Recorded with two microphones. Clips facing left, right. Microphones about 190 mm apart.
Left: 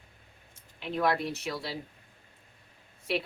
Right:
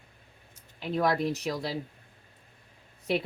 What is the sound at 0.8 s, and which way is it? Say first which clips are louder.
Speech: right 2 dB; 40° right (ahead or behind).